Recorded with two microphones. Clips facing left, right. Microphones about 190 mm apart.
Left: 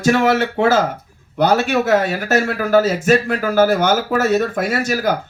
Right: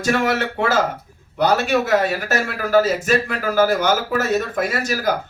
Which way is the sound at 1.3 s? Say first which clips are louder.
Left 2 dB; 45° left (ahead or behind).